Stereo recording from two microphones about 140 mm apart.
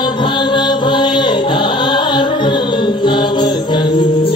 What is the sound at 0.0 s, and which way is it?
Music, 35° left (ahead or behind).